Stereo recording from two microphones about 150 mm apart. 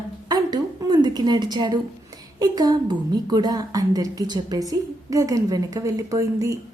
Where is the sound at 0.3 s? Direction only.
25° right (ahead or behind).